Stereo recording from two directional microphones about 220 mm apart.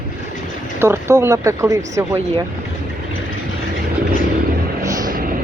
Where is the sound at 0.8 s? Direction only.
10° right (ahead or behind).